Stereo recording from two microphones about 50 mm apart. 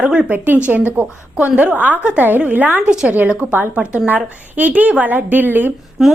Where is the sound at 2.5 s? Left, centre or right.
Right.